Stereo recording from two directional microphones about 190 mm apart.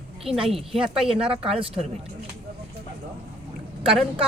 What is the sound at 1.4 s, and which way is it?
Speech, 30° right (ahead or behind).